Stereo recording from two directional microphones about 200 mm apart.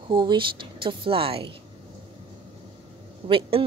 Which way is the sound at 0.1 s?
25° right (ahead or behind).